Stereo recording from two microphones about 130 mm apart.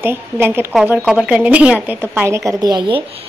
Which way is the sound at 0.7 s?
5° right (ahead or behind).